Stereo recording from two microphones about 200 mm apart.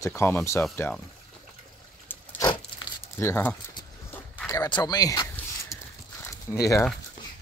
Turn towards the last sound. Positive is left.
turn(degrees=15)  # may be behind; listen again after turning